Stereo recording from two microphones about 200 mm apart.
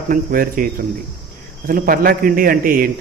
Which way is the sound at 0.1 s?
45° right (ahead or behind).